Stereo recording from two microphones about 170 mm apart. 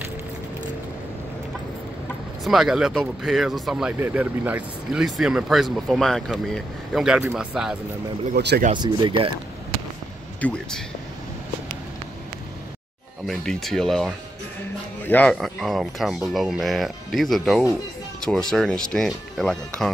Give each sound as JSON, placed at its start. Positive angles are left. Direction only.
{"t": 2.4, "sound": "speech", "side_deg": 0}
{"t": 8.4, "sound": "speech", "side_deg": -75}
{"t": 8.7, "sound": "speech", "side_deg": -25}
{"t": 10.4, "sound": "speech", "side_deg": 5}
{"t": 13.3, "sound": "speech", "side_deg": 0}